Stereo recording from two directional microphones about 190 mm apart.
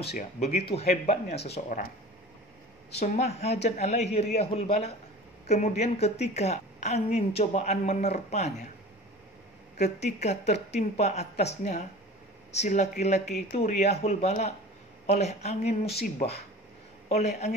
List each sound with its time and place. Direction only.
0.4 s a woman's voice: 35° left (ahead or behind)
2.9 s a woman's voice: 35° left (ahead or behind)
9.8 s a woman's voice: 35° left (ahead or behind)
17.1 s a woman's voice: 35° left (ahead or behind)